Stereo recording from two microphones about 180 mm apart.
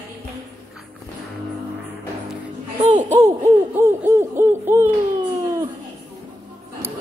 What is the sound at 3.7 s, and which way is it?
Hoot, 15° right (ahead or behind).